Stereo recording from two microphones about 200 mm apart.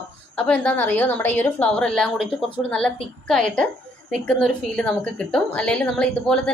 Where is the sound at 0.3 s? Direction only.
5° left (ahead or behind).